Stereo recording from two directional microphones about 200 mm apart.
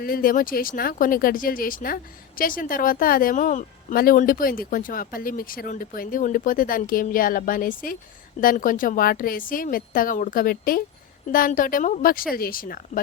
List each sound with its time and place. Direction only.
0.0 s speech: 45° left (ahead or behind)